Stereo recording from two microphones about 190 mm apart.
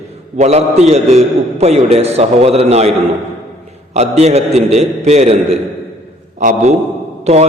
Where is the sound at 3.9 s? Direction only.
35° right (ahead or behind).